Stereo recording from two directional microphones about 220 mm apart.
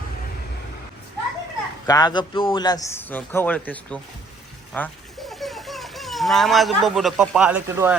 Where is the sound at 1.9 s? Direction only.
20° left (ahead or behind).